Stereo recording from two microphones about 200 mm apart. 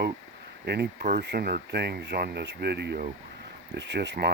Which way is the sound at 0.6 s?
55° right (ahead or behind).